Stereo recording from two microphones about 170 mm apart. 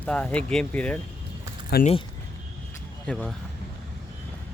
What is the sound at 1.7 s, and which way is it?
Speech, 60° left (ahead or behind).